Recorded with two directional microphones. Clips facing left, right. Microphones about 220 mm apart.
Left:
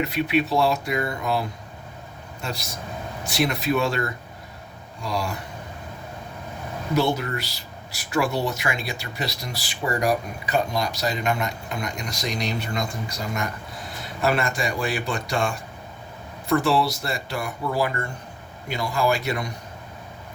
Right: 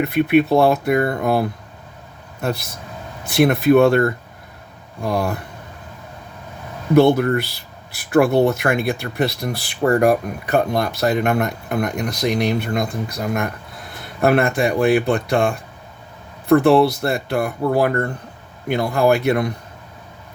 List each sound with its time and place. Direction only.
0.0 s speech: 55° right (ahead or behind)
6.9 s speech: 55° right (ahead or behind)